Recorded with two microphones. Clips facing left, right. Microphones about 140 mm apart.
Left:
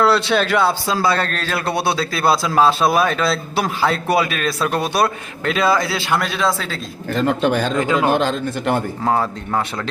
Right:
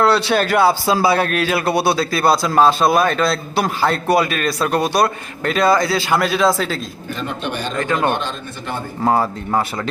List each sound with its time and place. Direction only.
0.0 s a man's voice: centre (ahead or behind)
7.1 s speech: 90° left
7.8 s a man's voice: 15° left (ahead or behind)
8.1 s speech: 90° left
9.0 s a man's voice: 5° right (ahead or behind)